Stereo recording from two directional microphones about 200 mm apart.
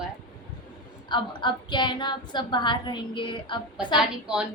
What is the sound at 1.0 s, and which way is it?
A woman's voice, 20° left (ahead or behind).